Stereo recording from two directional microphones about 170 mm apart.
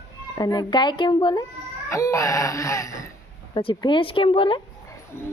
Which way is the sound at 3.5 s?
30° left (ahead or behind).